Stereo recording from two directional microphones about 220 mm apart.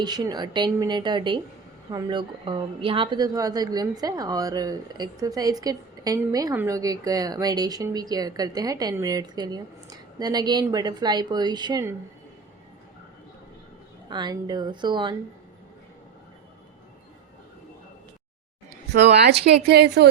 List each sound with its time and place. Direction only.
0.0 s a woman's voice: 20° right (ahead or behind)
14.1 s a woman's voice: 20° right (ahead or behind)
18.9 s a woman's voice: 50° right (ahead or behind)